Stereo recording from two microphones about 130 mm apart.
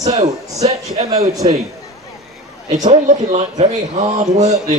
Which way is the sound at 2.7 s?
65° right (ahead or behind).